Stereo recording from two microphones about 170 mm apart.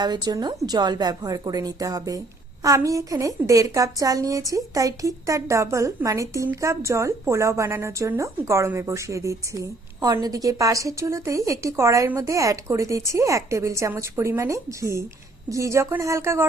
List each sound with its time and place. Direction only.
0.0 s a woman's voice: 25° right (ahead or behind)